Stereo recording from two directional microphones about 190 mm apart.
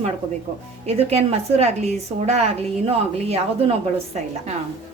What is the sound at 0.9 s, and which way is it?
A woman's voice, 35° right (ahead or behind).